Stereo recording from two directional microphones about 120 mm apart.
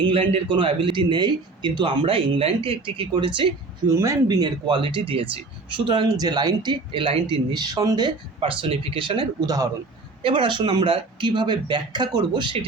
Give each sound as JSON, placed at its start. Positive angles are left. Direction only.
{"t": 0.0, "sound": "speech", "side_deg": -45}
{"t": 3.9, "sound": "speech", "side_deg": -25}
{"t": 8.4, "sound": "speech", "side_deg": -50}
{"t": 10.2, "sound": "speech", "side_deg": -45}